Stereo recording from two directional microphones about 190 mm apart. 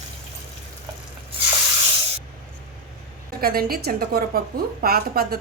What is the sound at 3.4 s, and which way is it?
A woman's voice, 55° right (ahead or behind).